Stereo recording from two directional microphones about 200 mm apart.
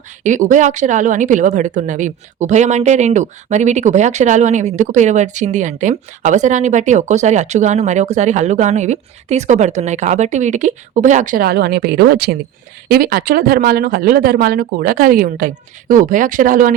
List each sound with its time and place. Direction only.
0.2 s speech: 40° right (ahead or behind)